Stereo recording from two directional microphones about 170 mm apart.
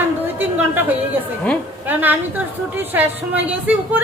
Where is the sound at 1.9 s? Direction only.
10° right (ahead or behind).